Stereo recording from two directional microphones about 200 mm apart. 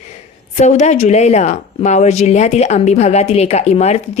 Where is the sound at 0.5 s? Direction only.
35° left (ahead or behind).